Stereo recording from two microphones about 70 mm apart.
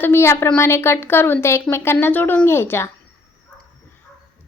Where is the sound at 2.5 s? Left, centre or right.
Left.